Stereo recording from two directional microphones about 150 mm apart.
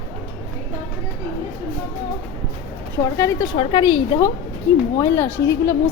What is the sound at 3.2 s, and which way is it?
Speech, 20° left (ahead or behind).